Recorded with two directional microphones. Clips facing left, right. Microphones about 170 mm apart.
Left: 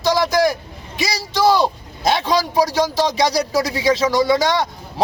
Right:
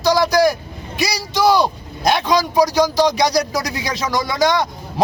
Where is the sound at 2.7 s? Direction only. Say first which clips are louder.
Right 3 dB; 25° left (ahead or behind).